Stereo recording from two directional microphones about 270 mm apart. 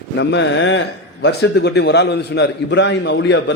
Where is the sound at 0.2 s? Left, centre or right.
Left.